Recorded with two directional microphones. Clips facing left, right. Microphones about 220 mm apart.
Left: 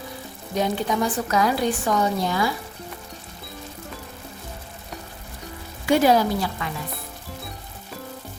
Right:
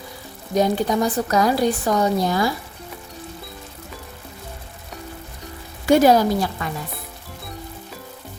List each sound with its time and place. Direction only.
0.5 s a woman's voice: 40° right (ahead or behind)
5.8 s a woman's voice: 45° right (ahead or behind)